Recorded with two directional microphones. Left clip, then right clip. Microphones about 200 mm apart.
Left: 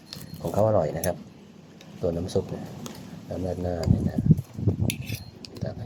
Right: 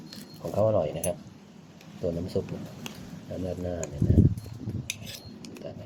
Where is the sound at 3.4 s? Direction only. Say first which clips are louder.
Left 3 dB; 10° left (ahead or behind).